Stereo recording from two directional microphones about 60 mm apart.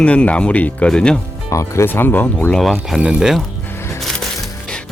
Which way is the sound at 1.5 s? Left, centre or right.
Left.